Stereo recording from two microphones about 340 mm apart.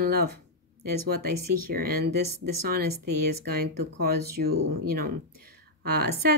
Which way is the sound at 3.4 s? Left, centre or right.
Right.